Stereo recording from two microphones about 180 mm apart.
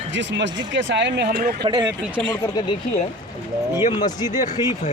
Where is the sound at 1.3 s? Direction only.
55° right (ahead or behind).